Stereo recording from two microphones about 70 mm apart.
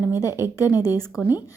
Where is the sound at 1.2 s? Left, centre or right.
Right.